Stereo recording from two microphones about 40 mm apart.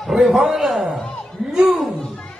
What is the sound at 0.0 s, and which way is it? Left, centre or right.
A man's voice, centre.